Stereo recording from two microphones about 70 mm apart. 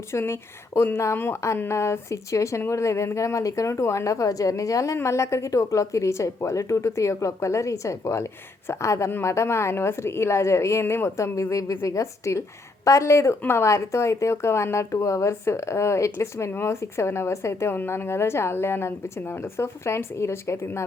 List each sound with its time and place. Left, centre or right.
0.1 s a woman's voice: left